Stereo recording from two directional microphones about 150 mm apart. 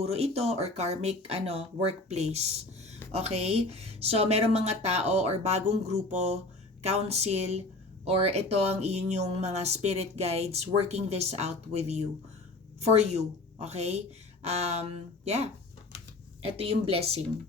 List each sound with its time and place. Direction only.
0.0 s speech: 45° right (ahead or behind)